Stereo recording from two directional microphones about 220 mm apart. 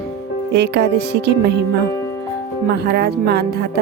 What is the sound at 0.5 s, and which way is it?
Music, 50° right (ahead or behind).